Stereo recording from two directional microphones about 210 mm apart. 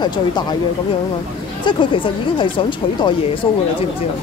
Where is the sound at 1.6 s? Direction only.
25° left (ahead or behind).